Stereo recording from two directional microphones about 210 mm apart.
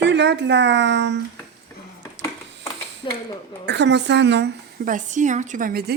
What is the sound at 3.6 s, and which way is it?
A woman's voice, 55° right (ahead or behind).